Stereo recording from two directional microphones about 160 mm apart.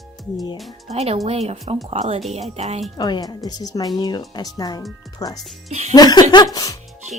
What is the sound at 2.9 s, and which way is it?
Speech, 25° left (ahead or behind).